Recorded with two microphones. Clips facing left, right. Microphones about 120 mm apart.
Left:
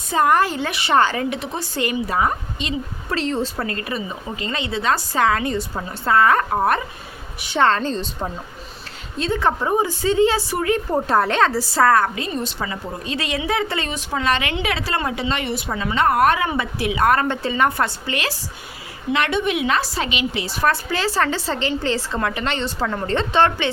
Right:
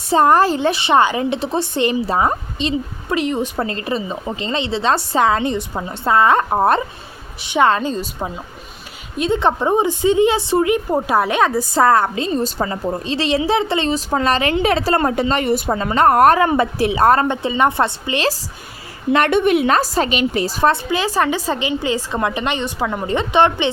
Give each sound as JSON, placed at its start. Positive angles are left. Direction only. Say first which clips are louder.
{"t": 0.1, "sound": "a woman's voice", "louder": "right 4 dB", "side_deg": -30}
{"t": 3.2, "sound": "a woman's voice", "louder": "right 3 dB", "side_deg": -15}
{"t": 7.4, "sound": "a woman's voice", "louder": "right 3 dB", "side_deg": -15}
{"t": 14.1, "sound": "a woman's voice", "louder": "right 2 dB", "side_deg": -40}
{"t": 17.2, "sound": "a woman's voice", "louder": "right 3 dB", "side_deg": -20}
{"t": 19.1, "sound": "a woman's voice", "louder": "right 6 dB", "side_deg": -50}
{"t": 20.7, "sound": "a woman's voice", "louder": "right 2 dB", "side_deg": -15}